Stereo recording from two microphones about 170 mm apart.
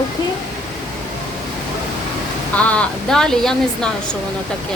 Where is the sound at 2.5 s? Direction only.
5° left (ahead or behind).